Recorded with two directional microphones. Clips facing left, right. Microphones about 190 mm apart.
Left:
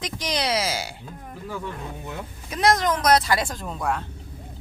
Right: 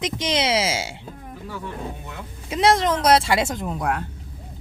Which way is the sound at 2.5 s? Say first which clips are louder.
Right 2 dB; 25° right (ahead or behind).